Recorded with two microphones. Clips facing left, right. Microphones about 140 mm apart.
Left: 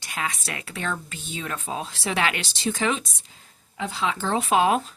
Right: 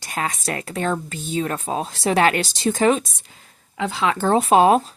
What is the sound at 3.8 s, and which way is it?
Speech, 80° right.